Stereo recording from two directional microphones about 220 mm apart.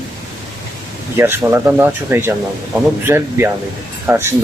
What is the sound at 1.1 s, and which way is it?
Speech, 10° right (ahead or behind).